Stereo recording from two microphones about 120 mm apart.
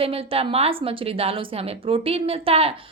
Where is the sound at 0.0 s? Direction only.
55° right (ahead or behind).